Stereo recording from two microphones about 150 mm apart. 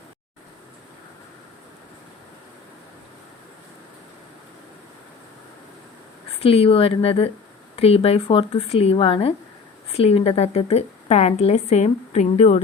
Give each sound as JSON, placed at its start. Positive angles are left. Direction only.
{"t": 6.4, "sound": "speech", "side_deg": 40}